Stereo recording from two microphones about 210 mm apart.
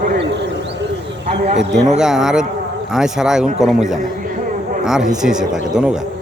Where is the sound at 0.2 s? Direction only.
55° right (ahead or behind).